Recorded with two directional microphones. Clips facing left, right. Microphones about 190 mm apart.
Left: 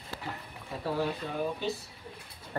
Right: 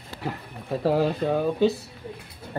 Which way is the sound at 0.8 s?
90° right.